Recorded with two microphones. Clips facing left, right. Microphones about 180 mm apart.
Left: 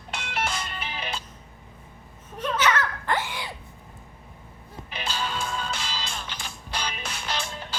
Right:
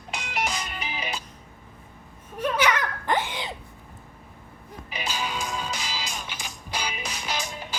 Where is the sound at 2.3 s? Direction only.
10° right (ahead or behind).